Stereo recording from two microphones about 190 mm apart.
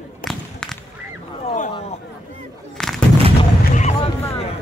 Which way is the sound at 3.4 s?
35° left (ahead or behind).